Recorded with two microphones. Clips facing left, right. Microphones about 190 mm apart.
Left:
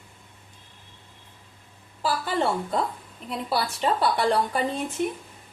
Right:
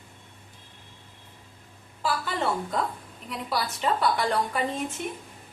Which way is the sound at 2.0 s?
35° left (ahead or behind).